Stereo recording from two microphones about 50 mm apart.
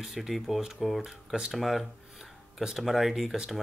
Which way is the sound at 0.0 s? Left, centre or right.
Centre.